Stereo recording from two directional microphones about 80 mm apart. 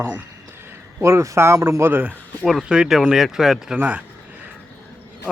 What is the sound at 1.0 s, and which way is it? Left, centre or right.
A man's voice, right.